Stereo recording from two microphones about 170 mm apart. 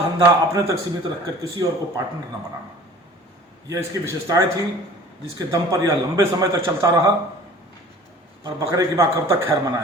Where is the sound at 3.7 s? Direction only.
15° right (ahead or behind).